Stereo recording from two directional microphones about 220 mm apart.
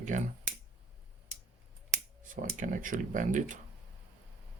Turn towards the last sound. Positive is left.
turn(degrees=-35)  # may be behind; listen again after turning